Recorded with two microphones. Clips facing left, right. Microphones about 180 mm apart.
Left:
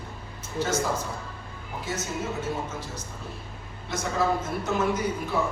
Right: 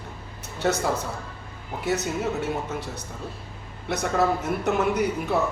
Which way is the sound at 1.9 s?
65° right (ahead or behind).